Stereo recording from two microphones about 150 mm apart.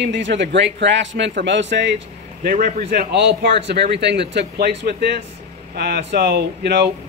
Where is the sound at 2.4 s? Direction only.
65° right (ahead or behind); by 3.0 s 90° right.